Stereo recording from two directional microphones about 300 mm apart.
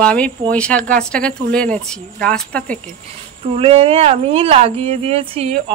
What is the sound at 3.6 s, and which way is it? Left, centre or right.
A woman's voice, centre.